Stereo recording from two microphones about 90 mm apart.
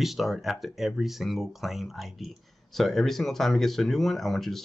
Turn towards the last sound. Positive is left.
turn(degrees=5)  # may be behind; listen again after turning